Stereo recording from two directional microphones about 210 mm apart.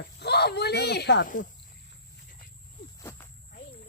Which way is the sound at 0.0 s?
50° left (ahead or behind).